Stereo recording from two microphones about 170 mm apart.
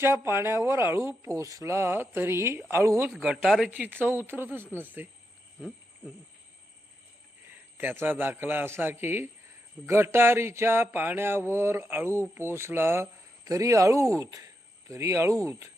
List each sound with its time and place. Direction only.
0.0 s speech: 15° right (ahead or behind)
3.1 s speech: centre (ahead or behind)
5.5 s jingle bell: 5° left (ahead or behind)
7.8 s speech: 10° right (ahead or behind)